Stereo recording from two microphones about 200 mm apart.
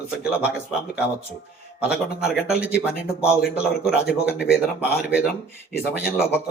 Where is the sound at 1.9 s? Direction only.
5° right (ahead or behind).